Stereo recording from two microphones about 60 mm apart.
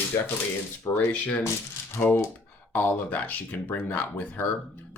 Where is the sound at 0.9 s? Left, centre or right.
Left.